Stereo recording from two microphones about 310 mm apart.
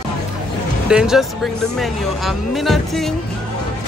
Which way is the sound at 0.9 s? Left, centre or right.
Centre.